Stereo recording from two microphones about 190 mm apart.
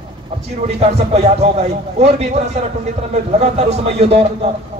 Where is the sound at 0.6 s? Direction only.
35° right (ahead or behind).